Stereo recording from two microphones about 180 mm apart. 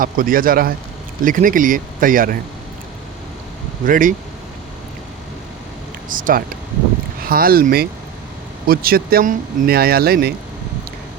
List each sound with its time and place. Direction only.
0.0 s speech: 50° right (ahead or behind)
3.8 s speech: 50° right (ahead or behind)
6.1 s speech: 50° right (ahead or behind)